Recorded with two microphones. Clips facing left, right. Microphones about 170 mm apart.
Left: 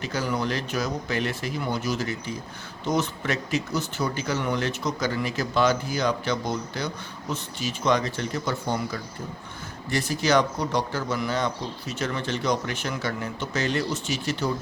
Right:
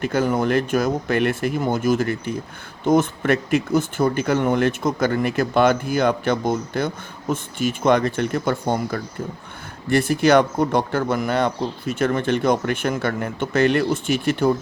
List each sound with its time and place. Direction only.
0.0 s speech: 55° right (ahead or behind)